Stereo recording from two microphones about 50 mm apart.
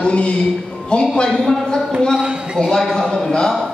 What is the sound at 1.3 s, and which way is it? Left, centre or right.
A man's voice, centre.